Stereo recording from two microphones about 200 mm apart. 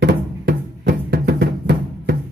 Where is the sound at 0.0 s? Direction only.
55° right (ahead or behind).